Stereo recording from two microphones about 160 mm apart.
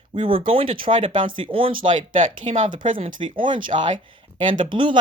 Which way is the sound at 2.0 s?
50° right (ahead or behind).